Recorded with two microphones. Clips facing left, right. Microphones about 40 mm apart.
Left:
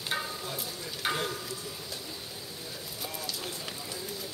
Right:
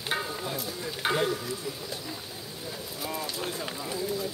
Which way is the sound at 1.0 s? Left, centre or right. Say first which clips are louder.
Right 5 dB; centre.